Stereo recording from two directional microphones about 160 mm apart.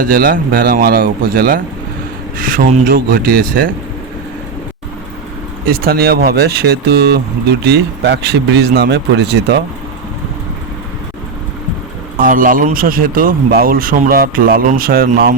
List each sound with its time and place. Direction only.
0.0 s speech: 60° right (ahead or behind)
5.6 s speech: 70° right (ahead or behind); by 9.6 s 90° right
12.1 s speech: 60° right (ahead or behind)